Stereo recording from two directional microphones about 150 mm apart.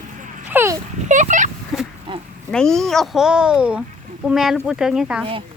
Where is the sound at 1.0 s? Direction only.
55° right (ahead or behind).